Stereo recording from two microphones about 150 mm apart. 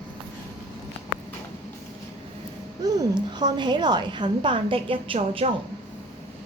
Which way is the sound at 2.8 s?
30° right (ahead or behind).